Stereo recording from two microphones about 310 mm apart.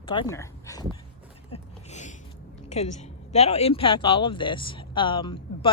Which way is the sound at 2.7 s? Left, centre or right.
Left.